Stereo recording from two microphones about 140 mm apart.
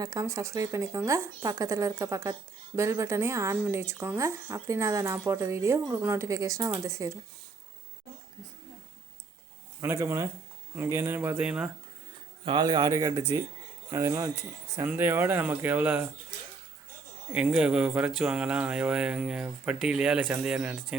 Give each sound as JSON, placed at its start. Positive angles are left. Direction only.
{"t": 0.0, "sound": "speech", "side_deg": -25}
{"t": 9.8, "sound": "speech", "side_deg": -20}
{"t": 12.5, "sound": "speech", "side_deg": -30}
{"t": 17.3, "sound": "speech", "side_deg": -5}